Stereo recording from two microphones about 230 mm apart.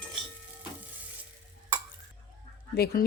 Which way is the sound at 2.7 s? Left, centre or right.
Left.